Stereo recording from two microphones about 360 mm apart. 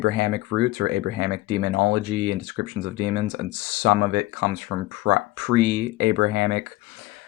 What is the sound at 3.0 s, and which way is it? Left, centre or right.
Speech, right.